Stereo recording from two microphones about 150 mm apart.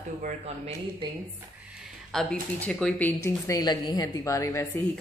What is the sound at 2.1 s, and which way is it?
Speech, 5° left (ahead or behind).